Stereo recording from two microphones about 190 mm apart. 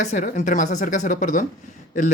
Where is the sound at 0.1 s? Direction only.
40° left (ahead or behind).